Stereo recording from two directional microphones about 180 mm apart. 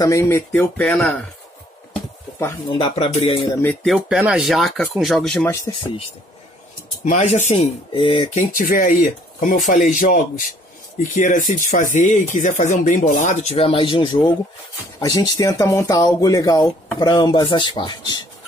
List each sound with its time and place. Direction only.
0.0 s speech: 15° left (ahead or behind)
2.7 s speech: 30° left (ahead or behind)
3.8 s speech: centre (ahead or behind)
7.1 s speech: 40° left (ahead or behind)
8.4 s speech: 50° left (ahead or behind); by 18.2 s 25° left (ahead or behind)